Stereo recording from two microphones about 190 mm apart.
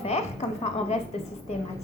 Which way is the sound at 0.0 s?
35° left (ahead or behind).